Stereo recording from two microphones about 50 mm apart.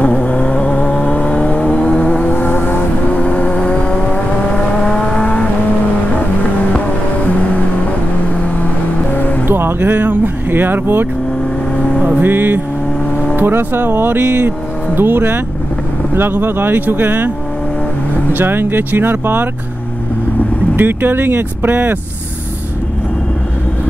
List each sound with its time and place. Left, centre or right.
0.0 s vehicle: left
2.3 s vehicle: left
3.1 s vehicle: left
9.1 s music: left
9.5 s music: right
9.9 s a sound: right
12.2 s vehicle: right
13.4 s speech: right
18.3 s speech: right
20.7 s speech: right